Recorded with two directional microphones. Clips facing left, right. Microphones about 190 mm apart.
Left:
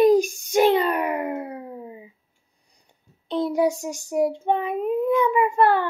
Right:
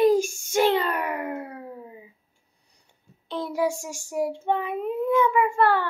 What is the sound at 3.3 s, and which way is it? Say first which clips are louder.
A child's voice: left 5 dB; 20° left (ahead or behind).